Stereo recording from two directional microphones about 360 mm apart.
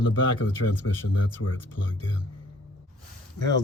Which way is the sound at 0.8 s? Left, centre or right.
Left.